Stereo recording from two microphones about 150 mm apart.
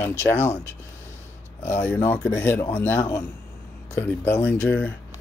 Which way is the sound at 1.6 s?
10° left (ahead or behind).